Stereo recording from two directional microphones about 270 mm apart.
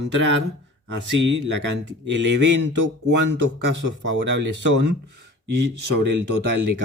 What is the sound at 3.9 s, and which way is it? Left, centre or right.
Speech, right.